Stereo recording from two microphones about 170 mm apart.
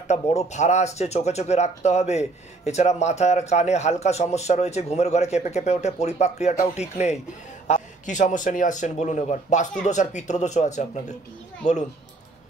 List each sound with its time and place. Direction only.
0.1 s speech: 40° left (ahead or behind)